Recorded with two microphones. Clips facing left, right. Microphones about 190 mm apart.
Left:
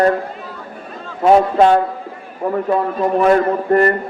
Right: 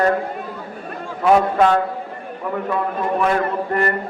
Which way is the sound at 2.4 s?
45° left (ahead or behind).